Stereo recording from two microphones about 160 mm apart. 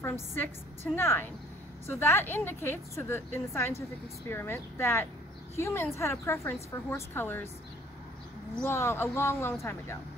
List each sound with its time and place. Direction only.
0.9 s a woman's voice: 15° left (ahead or behind)
8.6 s a woman's voice: 15° left (ahead or behind)